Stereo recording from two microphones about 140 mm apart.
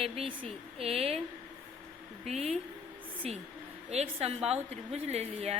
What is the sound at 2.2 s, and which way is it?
Speech, 50° right (ahead or behind).